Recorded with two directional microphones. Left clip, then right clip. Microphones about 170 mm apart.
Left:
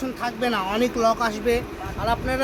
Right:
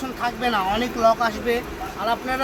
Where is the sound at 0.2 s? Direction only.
40° left (ahead or behind).